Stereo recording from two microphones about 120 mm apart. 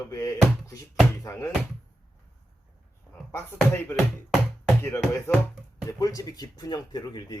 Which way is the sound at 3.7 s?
15° left (ahead or behind).